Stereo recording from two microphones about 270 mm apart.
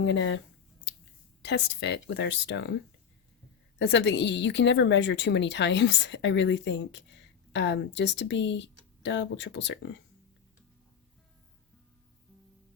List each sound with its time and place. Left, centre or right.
0.0 s a woman's voice: left
1.5 s a woman's voice: left
3.8 s a woman's voice: left